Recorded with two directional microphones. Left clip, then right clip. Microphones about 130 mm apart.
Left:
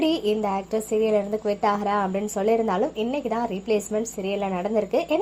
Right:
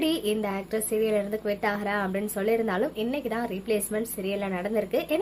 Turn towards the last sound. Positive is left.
turn(degrees=15)  # may be behind; listen again after turning